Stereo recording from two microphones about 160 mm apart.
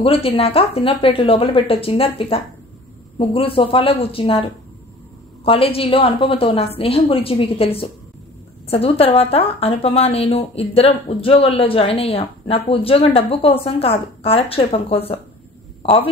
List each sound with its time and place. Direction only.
0.0 s a woman's voice: 35° left (ahead or behind)